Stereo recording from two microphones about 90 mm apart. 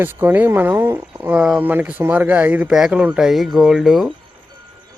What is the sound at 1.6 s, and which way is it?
Speech, 20° right (ahead or behind).